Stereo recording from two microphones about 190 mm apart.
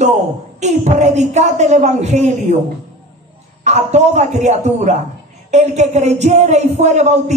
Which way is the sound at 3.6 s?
35° right (ahead or behind).